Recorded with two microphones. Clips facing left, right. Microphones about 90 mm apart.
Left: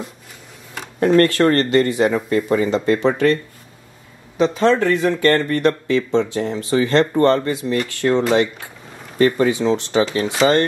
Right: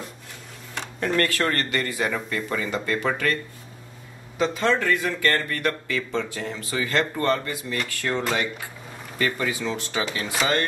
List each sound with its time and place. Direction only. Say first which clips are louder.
0.9 s speech: left 10 dB; 35° left (ahead or behind)
4.4 s speech: left 7 dB; 25° left (ahead or behind)
9.2 s speech: left 10 dB; 30° left (ahead or behind)